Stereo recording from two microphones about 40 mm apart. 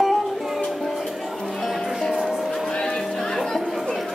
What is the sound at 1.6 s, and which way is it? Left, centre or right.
Music, centre.